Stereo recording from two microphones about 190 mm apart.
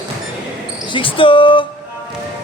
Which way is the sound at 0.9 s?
25° left (ahead or behind).